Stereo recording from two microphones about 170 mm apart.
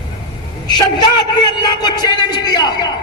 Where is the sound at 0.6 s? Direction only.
25° left (ahead or behind).